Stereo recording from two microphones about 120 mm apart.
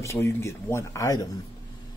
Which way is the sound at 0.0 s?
25° left (ahead or behind).